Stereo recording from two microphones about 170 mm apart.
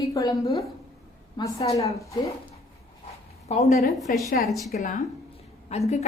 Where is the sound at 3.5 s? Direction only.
40° left (ahead or behind).